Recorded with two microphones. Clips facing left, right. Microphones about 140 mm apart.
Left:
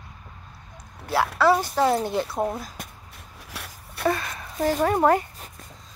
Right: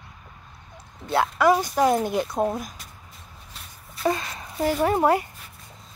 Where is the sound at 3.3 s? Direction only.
85° left.